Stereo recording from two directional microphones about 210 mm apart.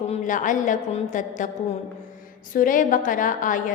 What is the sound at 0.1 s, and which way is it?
A woman's voice, 35° left (ahead or behind).